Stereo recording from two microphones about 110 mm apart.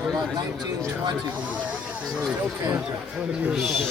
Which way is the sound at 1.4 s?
15° right (ahead or behind).